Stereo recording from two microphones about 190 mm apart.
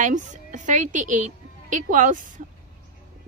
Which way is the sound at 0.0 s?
40° right (ahead or behind).